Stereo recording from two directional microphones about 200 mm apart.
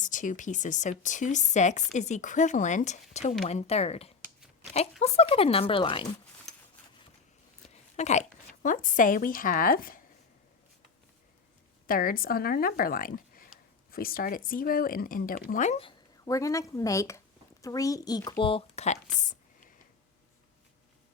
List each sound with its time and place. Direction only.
0.0 s speech: 40° left (ahead or behind)
7.7 s a woman's voice: 35° left (ahead or behind)
11.9 s speech: 45° left (ahead or behind); by 18.3 s 20° left (ahead or behind)
18.4 s speech: 30° left (ahead or behind)